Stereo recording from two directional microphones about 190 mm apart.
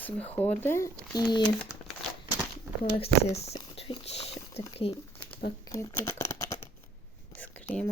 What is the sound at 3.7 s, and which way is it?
Patter, 30° left (ahead or behind).